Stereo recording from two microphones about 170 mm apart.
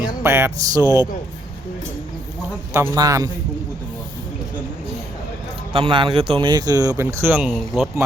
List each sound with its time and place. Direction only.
0.2 s speech: 15° right (ahead or behind)
2.7 s speech: 20° right (ahead or behind)
5.7 s speech: 30° right (ahead or behind); by 7.9 s 5° right (ahead or behind)